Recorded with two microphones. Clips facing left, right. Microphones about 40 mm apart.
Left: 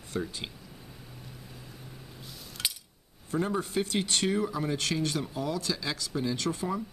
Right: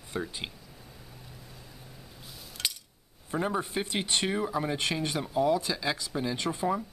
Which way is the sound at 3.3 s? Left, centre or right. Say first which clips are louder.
Even; centre.